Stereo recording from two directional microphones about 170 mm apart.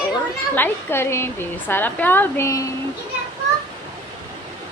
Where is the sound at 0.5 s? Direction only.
10° left (ahead or behind).